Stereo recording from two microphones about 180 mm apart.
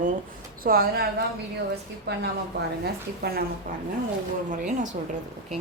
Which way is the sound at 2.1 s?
65° right (ahead or behind).